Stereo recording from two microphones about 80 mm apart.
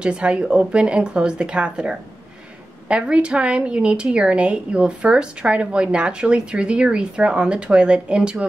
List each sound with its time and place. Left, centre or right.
0.0 s a woman's voice: centre